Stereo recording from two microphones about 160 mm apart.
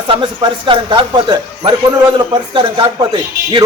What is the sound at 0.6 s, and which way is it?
A man's voice, 30° right (ahead or behind).